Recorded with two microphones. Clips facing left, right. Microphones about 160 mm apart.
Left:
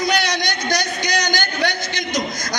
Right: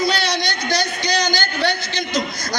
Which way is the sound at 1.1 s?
50° left (ahead or behind).